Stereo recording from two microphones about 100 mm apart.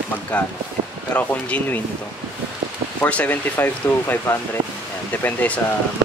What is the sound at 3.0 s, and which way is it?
Speech, 15° left (ahead or behind).